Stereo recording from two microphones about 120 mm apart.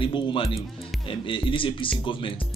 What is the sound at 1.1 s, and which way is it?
Speech, 45° left (ahead or behind).